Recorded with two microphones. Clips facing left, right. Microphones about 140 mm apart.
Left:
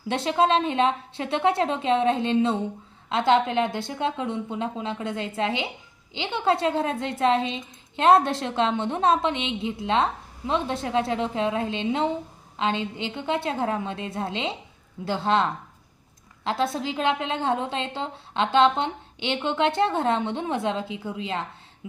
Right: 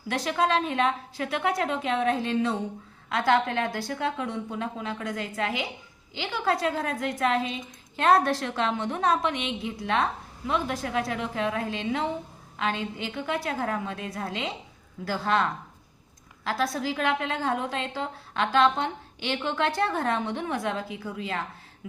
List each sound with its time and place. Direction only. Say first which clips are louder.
0.1 s a woman's voice: left 4 dB; 25° left (ahead or behind)